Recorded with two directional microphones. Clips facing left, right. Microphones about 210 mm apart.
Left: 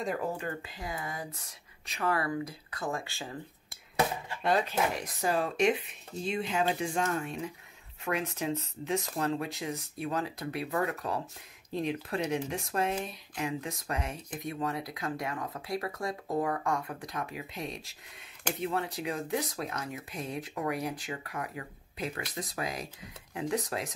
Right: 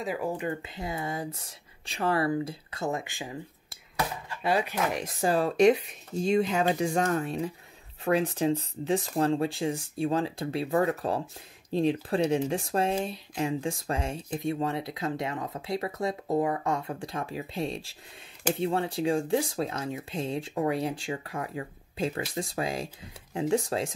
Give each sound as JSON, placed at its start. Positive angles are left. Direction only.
{"t": 0.0, "sound": "speech", "side_deg": -5}
{"t": 0.6, "sound": "speech", "side_deg": -25}
{"t": 4.4, "sound": "speech", "side_deg": -10}
{"t": 4.9, "sound": "speech", "side_deg": -30}